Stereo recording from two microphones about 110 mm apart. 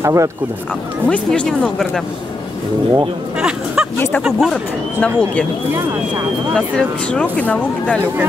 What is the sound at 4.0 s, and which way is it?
Speech, 20° left (ahead or behind).